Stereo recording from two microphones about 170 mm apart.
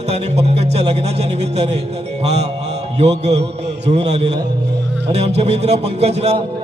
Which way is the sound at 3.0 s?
40° right (ahead or behind).